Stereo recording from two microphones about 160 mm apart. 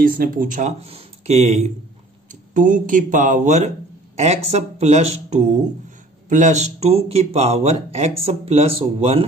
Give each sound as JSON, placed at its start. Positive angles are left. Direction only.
{"t": 0.0, "sound": "speech", "side_deg": -60}
{"t": 2.5, "sound": "speech", "side_deg": -55}